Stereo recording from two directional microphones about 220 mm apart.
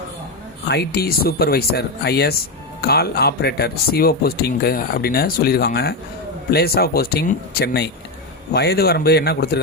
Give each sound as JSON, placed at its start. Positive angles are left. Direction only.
{"t": 0.7, "sound": "speech", "side_deg": 45}